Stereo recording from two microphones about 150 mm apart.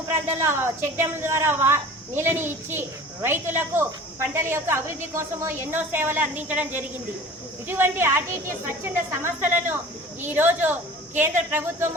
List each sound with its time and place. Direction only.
0.3 s a woman's voice: 15° right (ahead or behind)